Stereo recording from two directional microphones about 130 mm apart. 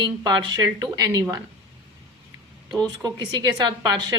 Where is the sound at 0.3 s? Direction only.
35° right (ahead or behind).